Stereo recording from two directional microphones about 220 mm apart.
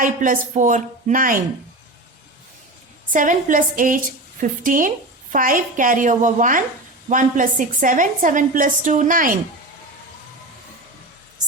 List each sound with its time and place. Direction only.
0.0 s a woman's voice: 35° right (ahead or behind)
3.1 s a woman's voice: 35° right (ahead or behind)